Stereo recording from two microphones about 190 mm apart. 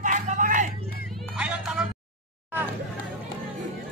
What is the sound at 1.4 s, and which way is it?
Meow, 5° right (ahead or behind).